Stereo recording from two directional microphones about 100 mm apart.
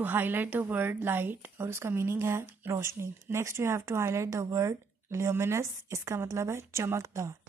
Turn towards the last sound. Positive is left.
turn(degrees=-30)  # may be behind; listen again after turning